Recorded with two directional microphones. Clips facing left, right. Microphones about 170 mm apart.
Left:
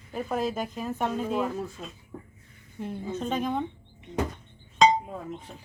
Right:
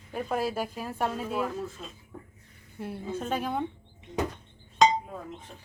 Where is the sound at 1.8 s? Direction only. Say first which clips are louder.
Left 2 dB; 20° left (ahead or behind).